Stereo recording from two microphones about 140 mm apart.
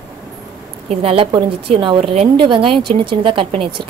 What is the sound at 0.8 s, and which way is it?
Speech, 40° right (ahead or behind).